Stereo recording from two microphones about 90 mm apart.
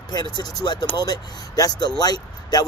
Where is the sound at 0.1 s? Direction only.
50° left (ahead or behind).